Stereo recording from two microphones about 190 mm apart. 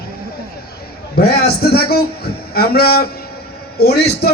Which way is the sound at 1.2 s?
55° left (ahead or behind).